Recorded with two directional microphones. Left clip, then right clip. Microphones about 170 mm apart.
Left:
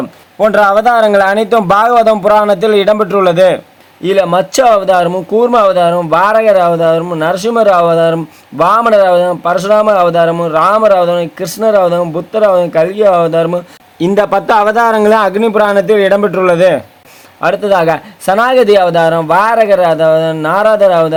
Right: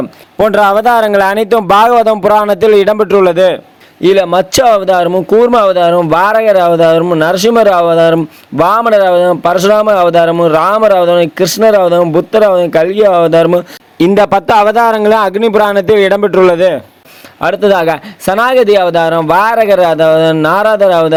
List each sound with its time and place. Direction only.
0.3 s speech: 45° right (ahead or behind)
14.2 s speech: 45° right (ahead or behind)